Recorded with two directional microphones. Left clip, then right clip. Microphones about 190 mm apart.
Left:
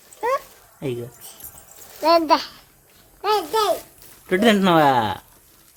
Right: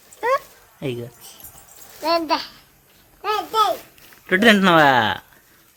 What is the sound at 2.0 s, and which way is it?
Speech, 65° left (ahead or behind).